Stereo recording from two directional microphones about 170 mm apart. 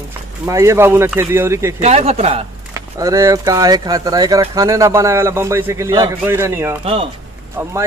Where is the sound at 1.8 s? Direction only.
40° right (ahead or behind).